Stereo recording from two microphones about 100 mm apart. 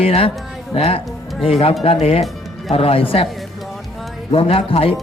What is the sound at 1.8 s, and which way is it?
Speech, 80° left.